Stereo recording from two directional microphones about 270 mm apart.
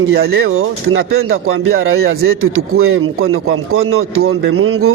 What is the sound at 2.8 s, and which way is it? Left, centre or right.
Speech, right.